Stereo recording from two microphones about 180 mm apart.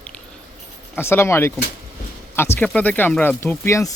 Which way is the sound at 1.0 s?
15° left (ahead or behind).